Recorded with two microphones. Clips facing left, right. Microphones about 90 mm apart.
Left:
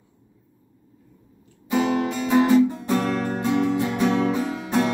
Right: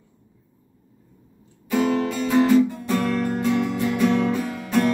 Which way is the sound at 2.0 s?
25° left (ahead or behind).